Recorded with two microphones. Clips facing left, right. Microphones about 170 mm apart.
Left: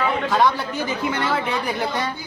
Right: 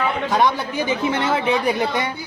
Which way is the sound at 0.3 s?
20° right (ahead or behind).